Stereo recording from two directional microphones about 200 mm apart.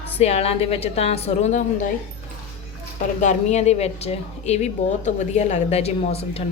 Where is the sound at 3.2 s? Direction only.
35° left (ahead or behind).